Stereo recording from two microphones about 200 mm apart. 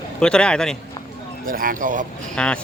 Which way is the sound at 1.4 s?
45° right (ahead or behind).